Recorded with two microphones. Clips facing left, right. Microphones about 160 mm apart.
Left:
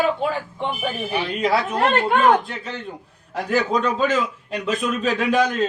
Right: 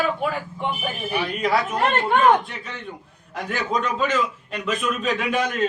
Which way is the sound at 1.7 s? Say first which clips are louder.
Left 2 dB; 5° left (ahead or behind).